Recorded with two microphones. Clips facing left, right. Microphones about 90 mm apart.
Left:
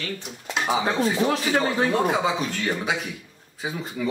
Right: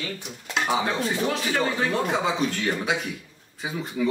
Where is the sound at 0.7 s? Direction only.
5° left (ahead or behind).